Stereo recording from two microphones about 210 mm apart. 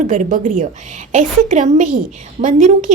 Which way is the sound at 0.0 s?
35° right (ahead or behind).